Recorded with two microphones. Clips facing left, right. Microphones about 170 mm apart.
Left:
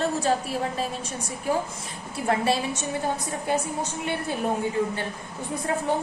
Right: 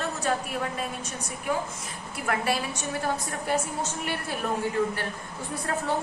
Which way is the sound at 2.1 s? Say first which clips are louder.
Left 4 dB; 25° left (ahead or behind).